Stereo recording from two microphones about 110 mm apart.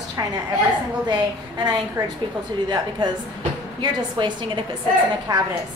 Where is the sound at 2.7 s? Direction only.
40° right (ahead or behind).